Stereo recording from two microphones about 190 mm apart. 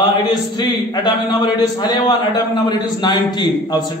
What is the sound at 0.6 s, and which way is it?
A man's voice, 20° left (ahead or behind).